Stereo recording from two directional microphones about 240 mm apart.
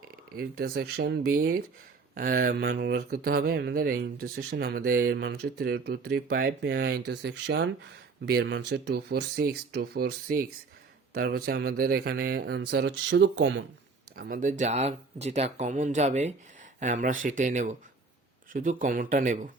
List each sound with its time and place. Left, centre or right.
0.3 s speech: right
14.2 s speech: right